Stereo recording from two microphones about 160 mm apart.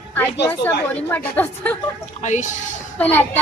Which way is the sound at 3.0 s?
10° left (ahead or behind).